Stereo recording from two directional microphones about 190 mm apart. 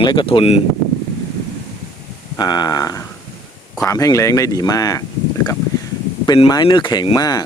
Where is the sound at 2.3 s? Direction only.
20° left (ahead or behind).